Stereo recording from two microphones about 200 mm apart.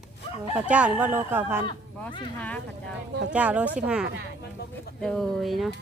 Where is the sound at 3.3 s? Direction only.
5° right (ahead or behind).